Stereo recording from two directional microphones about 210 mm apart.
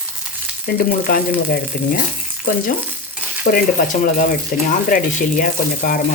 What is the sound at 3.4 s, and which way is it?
Speech, 45° left (ahead or behind).